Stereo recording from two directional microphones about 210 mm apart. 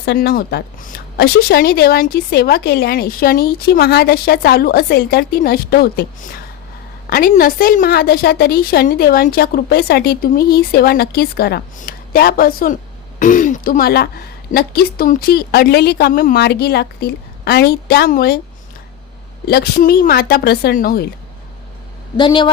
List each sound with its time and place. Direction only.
0.0 s a woman's voice: 50° left (ahead or behind)
7.1 s a woman's voice: 40° left (ahead or behind)
19.5 s a woman's voice: 50° left (ahead or behind)
22.2 s a woman's voice: 20° left (ahead or behind)